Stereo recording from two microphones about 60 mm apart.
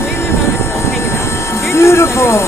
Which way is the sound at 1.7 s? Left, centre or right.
Left.